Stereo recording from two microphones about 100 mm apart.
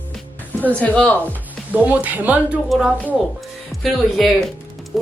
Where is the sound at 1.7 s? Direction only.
15° right (ahead or behind).